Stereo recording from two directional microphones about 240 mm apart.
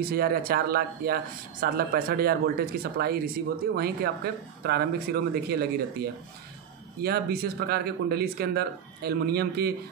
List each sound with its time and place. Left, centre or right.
0.1 s speech: right